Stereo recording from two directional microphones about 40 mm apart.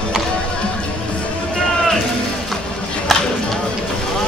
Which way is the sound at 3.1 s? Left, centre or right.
Centre.